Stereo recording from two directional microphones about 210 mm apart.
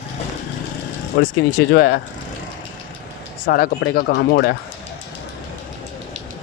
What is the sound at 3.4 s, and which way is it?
Speech, 45° left (ahead or behind).